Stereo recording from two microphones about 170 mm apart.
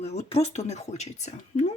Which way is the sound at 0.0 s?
40° left (ahead or behind).